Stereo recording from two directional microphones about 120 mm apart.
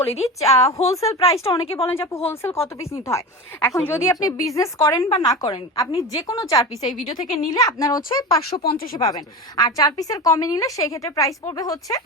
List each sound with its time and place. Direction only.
0.2 s speech: 25° left (ahead or behind)
0.5 s a woman's voice: 60° left (ahead or behind)
1.0 s speech: 30° left (ahead or behind)
4.9 s a woman's voice: 45° left (ahead or behind)
5.2 s speech: 30° left (ahead or behind)